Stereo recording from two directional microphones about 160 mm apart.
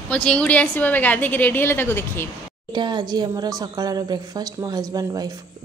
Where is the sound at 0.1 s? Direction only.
5° left (ahead or behind).